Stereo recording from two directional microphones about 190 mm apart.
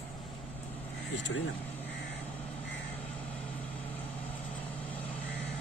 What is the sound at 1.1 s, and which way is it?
Speech, 75° left (ahead or behind).